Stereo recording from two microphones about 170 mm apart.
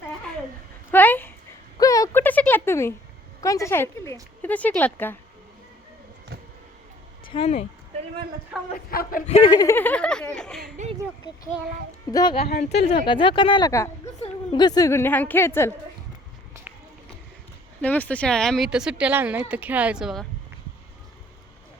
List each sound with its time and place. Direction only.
0.9 s a sound: 10° left (ahead or behind)
3.4 s speech: 20° left (ahead or behind)
7.3 s speech: 35° left (ahead or behind)
8.7 s speech: 60° left (ahead or behind)
9.2 s speech: 40° left (ahead or behind)
9.5 s speech: 20° left (ahead or behind)
10.8 s speech: 45° right (ahead or behind)
12.1 s speech: 30° left (ahead or behind)
12.5 s speech: 40° left (ahead or behind)
13.1 s speech: 30° left (ahead or behind)
17.7 s speech: 10° left (ahead or behind)